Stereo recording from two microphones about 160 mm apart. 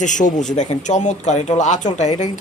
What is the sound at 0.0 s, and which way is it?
Speech, 50° left (ahead or behind).